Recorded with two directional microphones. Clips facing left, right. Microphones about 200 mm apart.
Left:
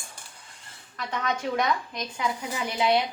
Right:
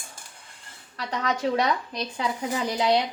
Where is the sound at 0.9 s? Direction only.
35° right (ahead or behind).